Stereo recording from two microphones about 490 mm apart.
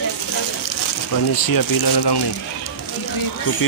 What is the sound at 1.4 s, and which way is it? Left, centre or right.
Speech, left.